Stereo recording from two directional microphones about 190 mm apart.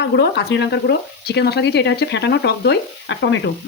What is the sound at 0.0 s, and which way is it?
Speech, 65° left (ahead or behind).